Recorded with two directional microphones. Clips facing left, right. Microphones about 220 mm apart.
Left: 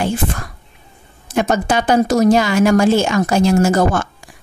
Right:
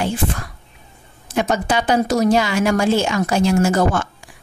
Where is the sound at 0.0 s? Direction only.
45° left (ahead or behind).